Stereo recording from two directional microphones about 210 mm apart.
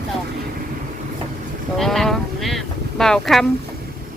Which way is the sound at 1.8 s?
Centre (ahead or behind).